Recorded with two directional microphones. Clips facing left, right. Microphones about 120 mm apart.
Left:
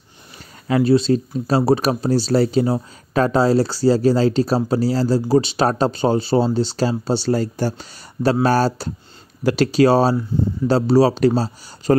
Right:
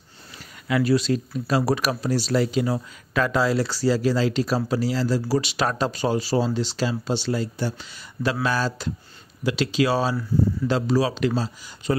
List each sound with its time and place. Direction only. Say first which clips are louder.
0.7 s speech: left 5 dB; 30° left (ahead or behind)